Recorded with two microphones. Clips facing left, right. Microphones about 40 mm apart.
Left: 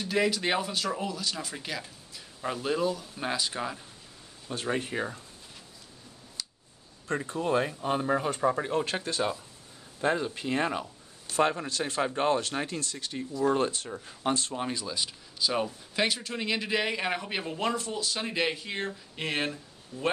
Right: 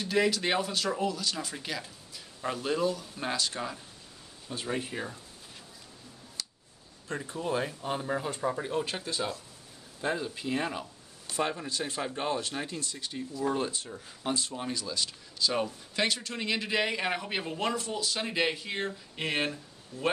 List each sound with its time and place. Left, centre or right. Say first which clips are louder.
0.0 s a man's voice: even; centre
4.6 s speech: left 3 dB; left
6.4 s a sound: even; centre
7.3 s speech: left 4 dB; left
10.0 s speech: left 4 dB; left
11.3 s speech: left 5 dB; left
14.6 s a man's voice: left 2 dB; left; by 20.1 s centre